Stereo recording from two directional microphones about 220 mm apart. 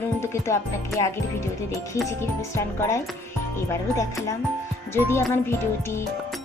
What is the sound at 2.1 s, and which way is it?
Speech, 15° left (ahead or behind).